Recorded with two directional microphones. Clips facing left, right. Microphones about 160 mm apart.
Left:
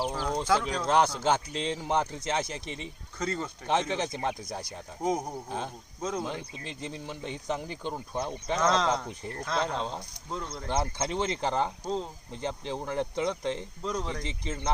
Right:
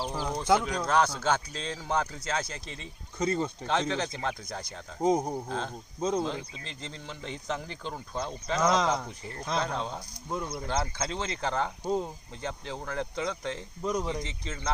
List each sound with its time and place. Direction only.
0.1 s speech: 15° right (ahead or behind)
0.9 s speech: 25° left (ahead or behind)
3.2 s speech: 15° right (ahead or behind)
3.7 s speech: 20° left (ahead or behind)
5.0 s speech: 25° right (ahead or behind)
5.5 s speech: 15° left (ahead or behind)
6.0 s speech: 20° right (ahead or behind)
6.2 s speech: 15° left (ahead or behind)
8.6 s speech: 10° right (ahead or behind)
9.7 s speech: 25° left (ahead or behind)
10.2 s speech: 10° right (ahead or behind)
10.7 s speech: 20° left (ahead or behind)
13.8 s speech: 10° right (ahead or behind)
14.3 s speech: 20° left (ahead or behind)